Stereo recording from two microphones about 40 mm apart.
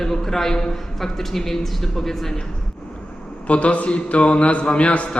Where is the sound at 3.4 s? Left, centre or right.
Left.